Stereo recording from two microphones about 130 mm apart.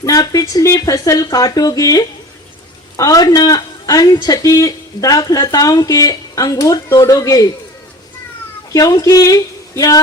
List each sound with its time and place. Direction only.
0.0 s speech: 25° left (ahead or behind)
8.7 s speech: 30° left (ahead or behind)